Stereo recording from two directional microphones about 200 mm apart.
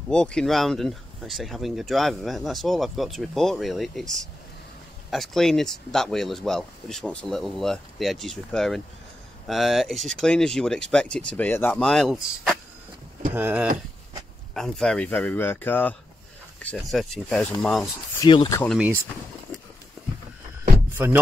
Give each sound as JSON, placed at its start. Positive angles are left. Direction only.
{"t": 0.1, "sound": "speech", "side_deg": 5}
{"t": 14.5, "sound": "speech", "side_deg": 5}
{"t": 18.2, "sound": "speech", "side_deg": 20}